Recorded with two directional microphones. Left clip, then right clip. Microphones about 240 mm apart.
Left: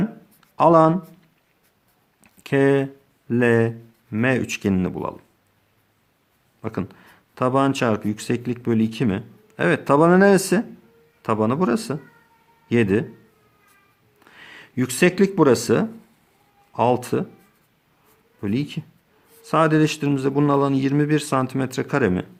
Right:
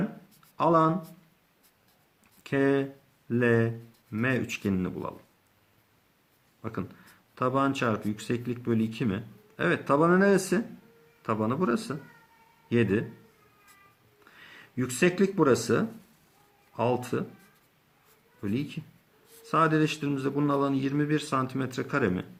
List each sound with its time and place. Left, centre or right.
0.5 s speech: left
2.2 s a sound: left
4.1 s speech: left
6.6 s a man's voice: left
14.3 s speech: left
18.3 s speech: left